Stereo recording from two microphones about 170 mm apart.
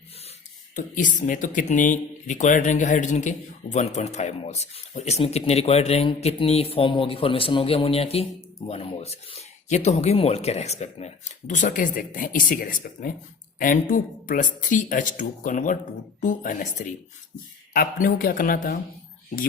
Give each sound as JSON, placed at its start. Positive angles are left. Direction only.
{"t": 0.8, "sound": "speech", "side_deg": 50}